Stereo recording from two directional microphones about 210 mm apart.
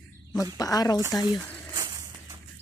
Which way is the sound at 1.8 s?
15° right (ahead or behind).